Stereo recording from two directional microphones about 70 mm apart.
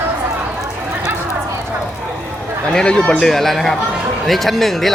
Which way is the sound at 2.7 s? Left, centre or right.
Centre.